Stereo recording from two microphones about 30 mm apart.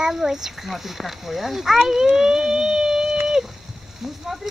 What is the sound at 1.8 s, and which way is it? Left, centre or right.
Speech, centre.